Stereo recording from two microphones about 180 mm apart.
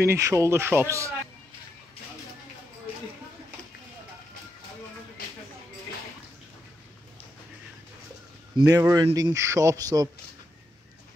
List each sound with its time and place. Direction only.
0.0 s speech: 15° right (ahead or behind)
8.5 s speech: 20° right (ahead or behind)